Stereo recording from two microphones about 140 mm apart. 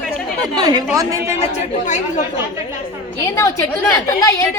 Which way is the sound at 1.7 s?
60° left (ahead or behind).